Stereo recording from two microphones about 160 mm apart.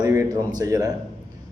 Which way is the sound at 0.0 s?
20° right (ahead or behind).